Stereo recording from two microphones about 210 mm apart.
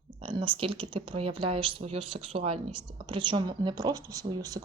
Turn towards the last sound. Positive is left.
turn(degrees=-15)  # may be behind; listen again after turning